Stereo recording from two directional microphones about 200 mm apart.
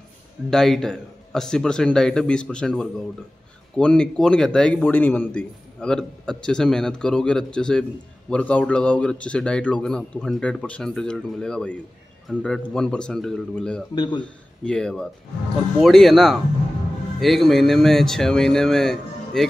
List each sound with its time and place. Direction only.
0.5 s a man's voice: centre (ahead or behind)
13.9 s speech: 20° left (ahead or behind)
14.2 s a man's voice: 5° left (ahead or behind)